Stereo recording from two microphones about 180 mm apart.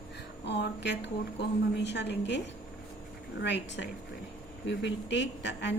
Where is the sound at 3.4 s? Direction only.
75° left (ahead or behind).